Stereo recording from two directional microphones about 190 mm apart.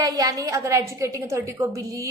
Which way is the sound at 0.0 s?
20° right (ahead or behind).